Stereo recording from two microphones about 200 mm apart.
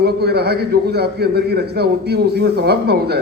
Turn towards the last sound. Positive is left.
turn(degrees=-55)  # may be behind; listen again after turning